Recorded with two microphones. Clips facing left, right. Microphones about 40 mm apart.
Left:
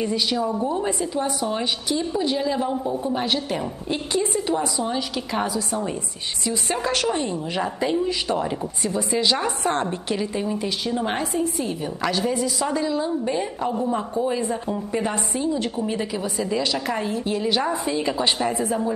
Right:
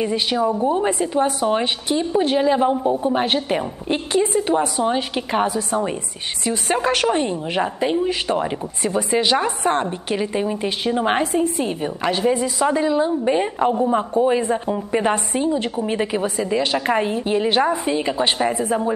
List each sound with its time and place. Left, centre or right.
0.0 s a woman's voice: right